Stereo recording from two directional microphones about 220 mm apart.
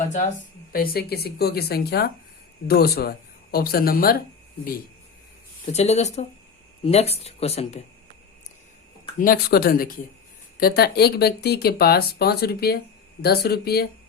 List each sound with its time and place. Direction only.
0.7 s speech: 45° left (ahead or behind)
5.6 s speech: 30° left (ahead or behind)
9.1 s speech: 40° left (ahead or behind)